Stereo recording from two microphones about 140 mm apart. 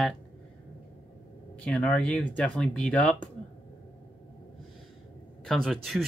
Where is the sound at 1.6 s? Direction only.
10° left (ahead or behind).